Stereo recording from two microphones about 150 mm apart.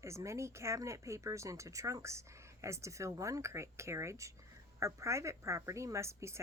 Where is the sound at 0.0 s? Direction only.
20° right (ahead or behind).